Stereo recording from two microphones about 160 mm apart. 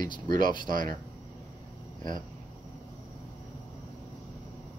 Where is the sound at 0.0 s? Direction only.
25° left (ahead or behind).